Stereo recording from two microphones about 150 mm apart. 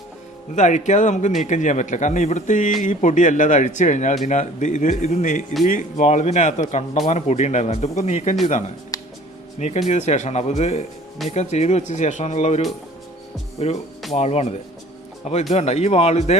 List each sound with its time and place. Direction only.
0.5 s speech: 50° left (ahead or behind)
8.9 s music: 25° left (ahead or behind)
9.6 s speech: 50° left (ahead or behind)